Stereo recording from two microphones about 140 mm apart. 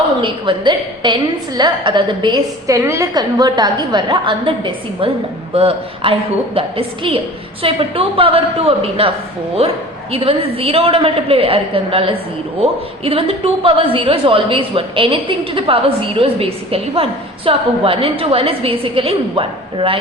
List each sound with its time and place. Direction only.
0.2 s a woman's voice: 35° right (ahead or behind)